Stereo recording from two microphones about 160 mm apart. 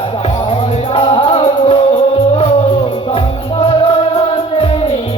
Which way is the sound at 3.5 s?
35° left (ahead or behind).